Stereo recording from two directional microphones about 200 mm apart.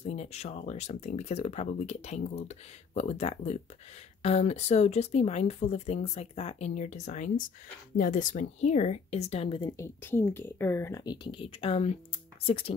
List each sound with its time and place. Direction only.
0.0 s speech: 35° left (ahead or behind)